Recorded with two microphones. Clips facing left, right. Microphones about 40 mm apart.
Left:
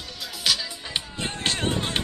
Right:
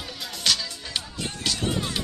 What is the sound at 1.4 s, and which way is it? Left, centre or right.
Music, left.